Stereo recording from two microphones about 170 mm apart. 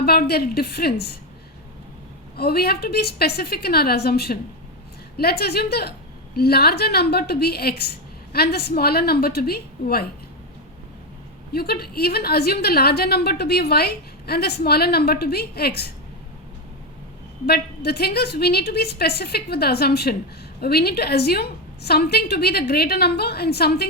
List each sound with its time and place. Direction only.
0.0 s a woman's voice: 65° left (ahead or behind)
2.3 s a woman's voice: 65° left (ahead or behind)
11.5 s a woman's voice: 65° left (ahead or behind)
17.4 s a woman's voice: 70° left (ahead or behind)